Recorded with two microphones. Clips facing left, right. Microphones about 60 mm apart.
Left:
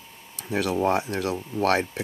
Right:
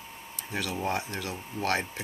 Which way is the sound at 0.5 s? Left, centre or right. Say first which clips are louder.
Left 8 dB; left.